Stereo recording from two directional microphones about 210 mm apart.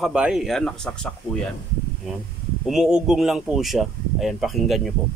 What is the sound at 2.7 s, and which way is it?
Speech, 5° right (ahead or behind).